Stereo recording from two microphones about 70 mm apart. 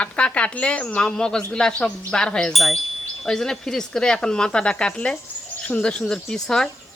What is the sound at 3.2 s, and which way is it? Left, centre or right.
A woman's voice, centre.